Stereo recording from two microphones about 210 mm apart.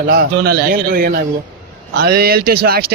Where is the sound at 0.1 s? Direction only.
45° right (ahead or behind).